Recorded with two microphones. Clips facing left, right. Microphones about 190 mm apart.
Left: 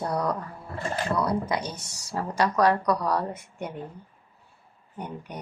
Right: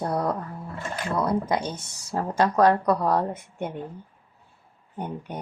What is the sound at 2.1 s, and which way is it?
Speech, 45° right (ahead or behind).